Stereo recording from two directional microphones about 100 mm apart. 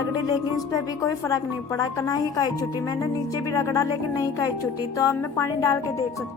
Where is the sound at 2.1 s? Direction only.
40° left (ahead or behind).